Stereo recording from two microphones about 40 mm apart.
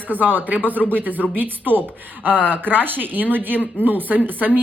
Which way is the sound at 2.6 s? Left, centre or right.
Right.